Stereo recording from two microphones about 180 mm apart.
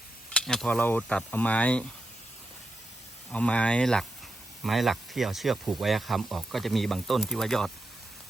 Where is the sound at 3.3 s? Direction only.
5° left (ahead or behind).